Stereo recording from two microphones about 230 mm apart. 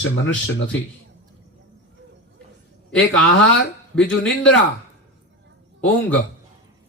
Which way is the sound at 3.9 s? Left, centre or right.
Centre.